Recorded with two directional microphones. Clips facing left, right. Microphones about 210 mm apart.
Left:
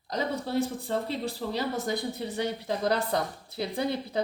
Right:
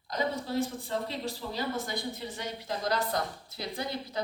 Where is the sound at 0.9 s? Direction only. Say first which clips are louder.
Left 3 dB; 35° left (ahead or behind).